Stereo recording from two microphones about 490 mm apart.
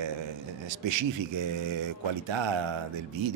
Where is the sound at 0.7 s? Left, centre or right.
Right.